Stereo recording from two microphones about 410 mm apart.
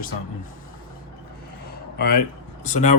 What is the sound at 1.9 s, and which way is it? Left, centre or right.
Speech, left.